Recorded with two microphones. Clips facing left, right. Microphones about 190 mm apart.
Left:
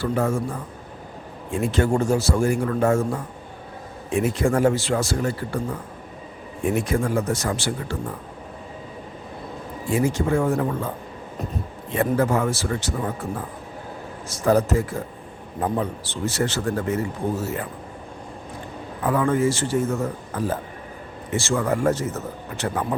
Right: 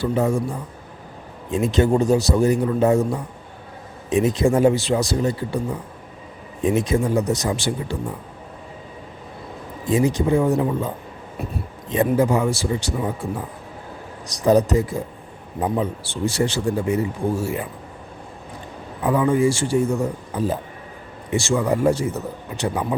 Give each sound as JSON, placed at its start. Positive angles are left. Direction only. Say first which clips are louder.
{"t": 0.0, "sound": "a man's voice", "louder": "right 2 dB", "side_deg": -15}
{"t": 9.9, "sound": "a man's voice", "louder": "right 3 dB", "side_deg": -15}
{"t": 14.3, "sound": "a man's voice", "louder": "right 3 dB", "side_deg": -15}
{"t": 19.0, "sound": "a man's voice", "louder": "right 2 dB", "side_deg": -15}